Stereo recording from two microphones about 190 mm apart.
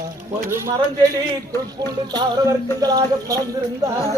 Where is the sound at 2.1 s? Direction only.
20° right (ahead or behind).